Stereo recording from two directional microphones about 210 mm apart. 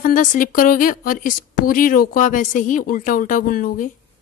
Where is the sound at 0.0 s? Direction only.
40° left (ahead or behind).